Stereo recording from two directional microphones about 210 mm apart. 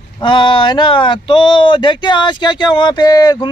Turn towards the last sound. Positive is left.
turn(degrees=20)  # may be behind; listen again after turning